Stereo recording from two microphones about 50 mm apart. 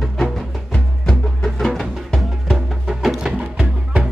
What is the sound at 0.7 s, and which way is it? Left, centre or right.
Music, centre.